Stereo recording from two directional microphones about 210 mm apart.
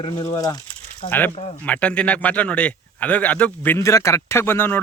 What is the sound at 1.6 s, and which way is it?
A man's voice, 5° left (ahead or behind).